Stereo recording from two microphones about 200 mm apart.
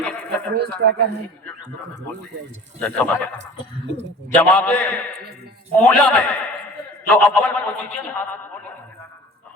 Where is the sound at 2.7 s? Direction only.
5° left (ahead or behind).